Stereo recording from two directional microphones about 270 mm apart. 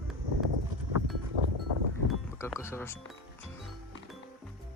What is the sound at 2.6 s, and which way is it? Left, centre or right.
Speech, centre.